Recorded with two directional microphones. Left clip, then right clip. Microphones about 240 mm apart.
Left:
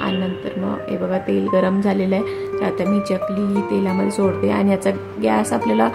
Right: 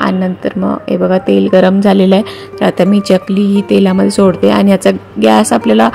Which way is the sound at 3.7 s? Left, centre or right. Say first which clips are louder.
Right 12 dB; right.